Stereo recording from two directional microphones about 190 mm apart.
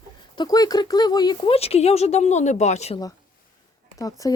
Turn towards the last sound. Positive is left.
turn(degrees=20)  # may be behind; listen again after turning